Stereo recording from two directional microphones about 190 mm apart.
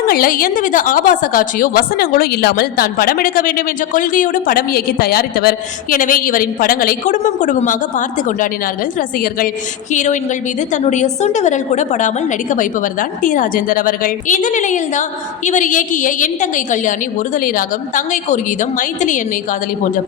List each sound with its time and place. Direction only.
0.1 s a woman's voice: 50° left (ahead or behind)